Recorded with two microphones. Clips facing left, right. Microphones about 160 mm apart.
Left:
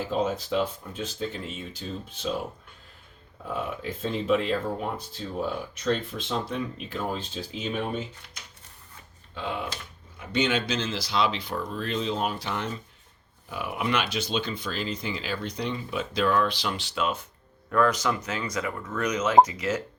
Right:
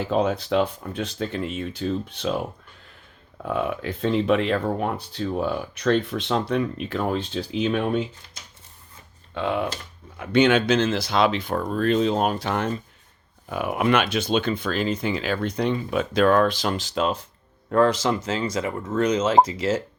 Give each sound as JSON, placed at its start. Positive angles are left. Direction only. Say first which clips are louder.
{"t": 0.1, "sound": "speech", "louder": "right 5 dB", "side_deg": -65}
{"t": 3.4, "sound": "speech", "louder": "right 6 dB", "side_deg": -65}
{"t": 9.3, "sound": "speech", "louder": "right 7 dB", "side_deg": -60}